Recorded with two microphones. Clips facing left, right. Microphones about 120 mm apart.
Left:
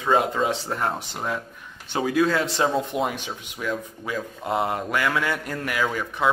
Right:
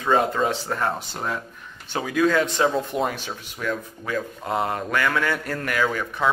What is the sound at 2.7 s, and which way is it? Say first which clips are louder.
Speech: even; 10° left (ahead or behind).